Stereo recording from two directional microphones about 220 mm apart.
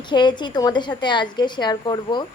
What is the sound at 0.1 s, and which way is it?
A woman's voice, 20° left (ahead or behind).